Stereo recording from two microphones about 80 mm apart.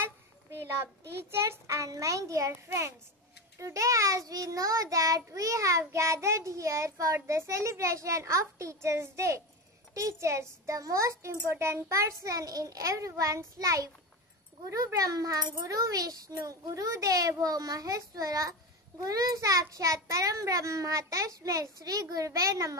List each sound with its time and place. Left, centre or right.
1.3 s a child's voice: right